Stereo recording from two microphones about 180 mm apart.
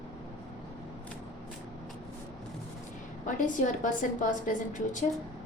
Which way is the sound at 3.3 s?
45° left (ahead or behind).